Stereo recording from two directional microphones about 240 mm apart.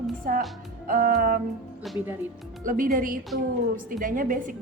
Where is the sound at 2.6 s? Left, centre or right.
Right.